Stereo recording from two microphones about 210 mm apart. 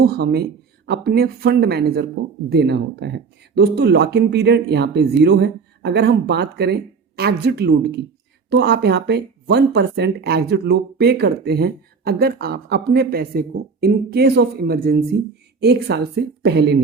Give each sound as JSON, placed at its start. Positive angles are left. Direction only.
{"t": 0.0, "sound": "speech", "side_deg": -50}